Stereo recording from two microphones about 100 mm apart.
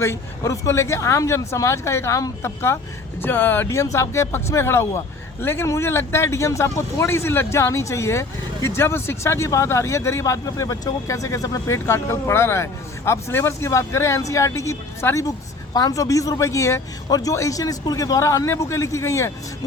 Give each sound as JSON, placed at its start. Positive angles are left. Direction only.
{"t": 0.0, "sound": "speech", "side_deg": 30}